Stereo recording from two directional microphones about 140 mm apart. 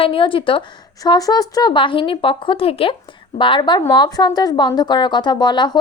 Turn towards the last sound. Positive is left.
turn(degrees=30)  # may be behind; listen again after turning